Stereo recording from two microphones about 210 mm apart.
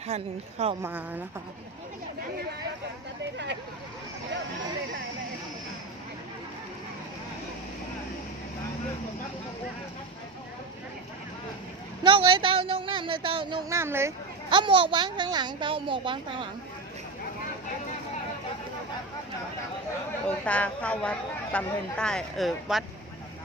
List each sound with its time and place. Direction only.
0.1 s a woman's voice: 30° right (ahead or behind)
0.8 s a woman's voice: 10° right (ahead or behind)
3.3 s speech: 55° right (ahead or behind)
12.0 s speech: 25° right (ahead or behind)
14.5 s speech: 25° right (ahead or behind)
20.2 s a woman's voice: 5° left (ahead or behind)